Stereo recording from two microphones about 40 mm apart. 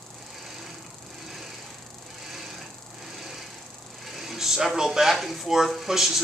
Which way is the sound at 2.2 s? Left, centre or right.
Centre.